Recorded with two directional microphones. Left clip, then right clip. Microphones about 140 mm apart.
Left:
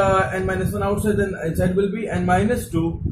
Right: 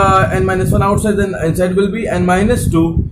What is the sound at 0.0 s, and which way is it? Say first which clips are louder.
A man's voice: right 7 dB; 45° right (ahead or behind).